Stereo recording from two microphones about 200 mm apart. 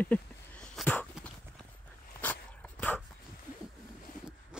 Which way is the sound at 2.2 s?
10° left (ahead or behind).